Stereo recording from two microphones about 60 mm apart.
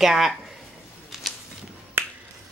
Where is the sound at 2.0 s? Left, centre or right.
Right.